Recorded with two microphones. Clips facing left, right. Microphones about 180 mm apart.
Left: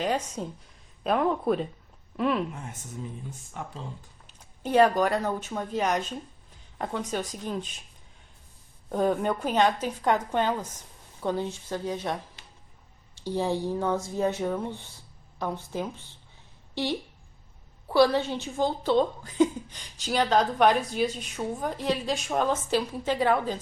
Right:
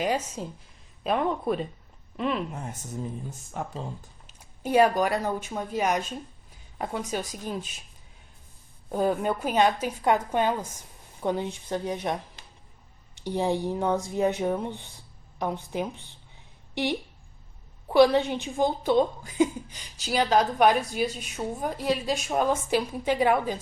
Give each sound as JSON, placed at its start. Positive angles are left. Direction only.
{"t": 0.0, "sound": "a woman's voice", "side_deg": -10}
{"t": 2.6, "sound": "speech", "side_deg": -40}
{"t": 4.6, "sound": "a woman's voice", "side_deg": -10}
{"t": 8.9, "sound": "a woman's voice", "side_deg": -5}
{"t": 12.4, "sound": "a sound", "side_deg": -40}
{"t": 13.1, "sound": "a woman's voice", "side_deg": -15}